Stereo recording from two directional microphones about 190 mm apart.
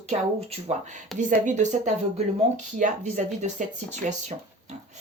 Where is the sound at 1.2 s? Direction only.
40° right (ahead or behind).